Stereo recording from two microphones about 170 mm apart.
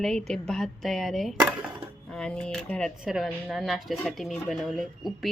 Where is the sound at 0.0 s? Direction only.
Centre (ahead or behind).